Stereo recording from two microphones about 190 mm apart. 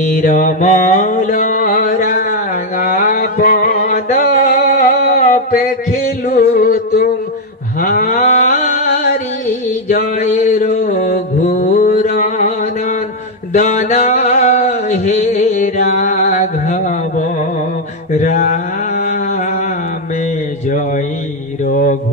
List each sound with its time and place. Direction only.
0.2 s mantra: 40° left (ahead or behind)
6.2 s music: 50° left (ahead or behind)
7.8 s a sound: 45° left (ahead or behind)
9.8 s mantra: 40° left (ahead or behind)
13.5 s music: 35° left (ahead or behind)
18.1 s mantra: 40° left (ahead or behind)
21.6 s mantra: 45° left (ahead or behind)